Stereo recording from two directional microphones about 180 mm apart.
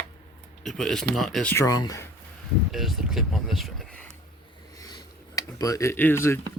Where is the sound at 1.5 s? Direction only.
20° left (ahead or behind).